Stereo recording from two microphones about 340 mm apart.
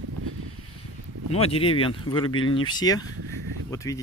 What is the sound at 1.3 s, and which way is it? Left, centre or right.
Speech, centre.